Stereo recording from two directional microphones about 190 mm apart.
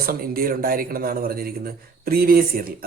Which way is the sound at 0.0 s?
50° right (ahead or behind).